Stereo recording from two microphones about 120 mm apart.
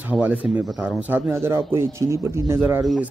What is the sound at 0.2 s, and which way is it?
Speech, 15° right (ahead or behind).